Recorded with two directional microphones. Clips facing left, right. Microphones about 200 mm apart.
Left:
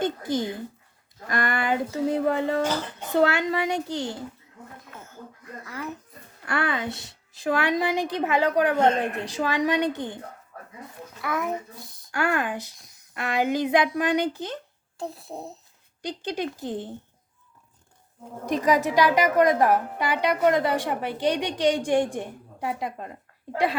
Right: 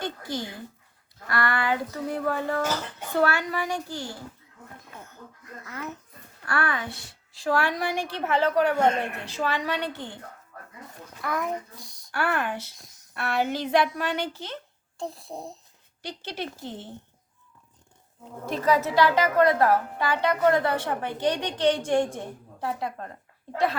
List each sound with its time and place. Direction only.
0.2 s speech: 50° left (ahead or behind)
1.3 s a woman's voice: 20° left (ahead or behind)
6.4 s a woman's voice: 20° left (ahead or behind)
11.2 s a child's voice: centre (ahead or behind)
12.1 s a woman's voice: 15° left (ahead or behind)
14.9 s a child's voice: centre (ahead or behind)
16.0 s a woman's voice: 15° left (ahead or behind)
18.4 s a woman's voice: 15° left (ahead or behind)